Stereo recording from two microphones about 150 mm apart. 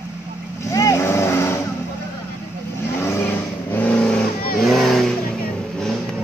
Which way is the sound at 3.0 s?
15° left (ahead or behind).